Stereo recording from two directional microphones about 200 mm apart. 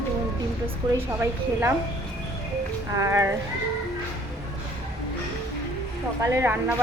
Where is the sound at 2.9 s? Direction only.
15° right (ahead or behind).